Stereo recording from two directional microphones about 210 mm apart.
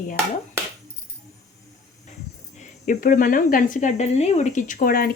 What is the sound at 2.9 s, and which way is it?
Speech, 40° left (ahead or behind).